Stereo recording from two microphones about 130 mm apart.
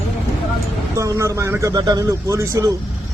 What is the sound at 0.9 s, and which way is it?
Speech, 25° right (ahead or behind).